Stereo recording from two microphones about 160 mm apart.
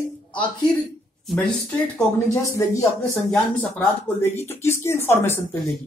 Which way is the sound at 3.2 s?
10° left (ahead or behind).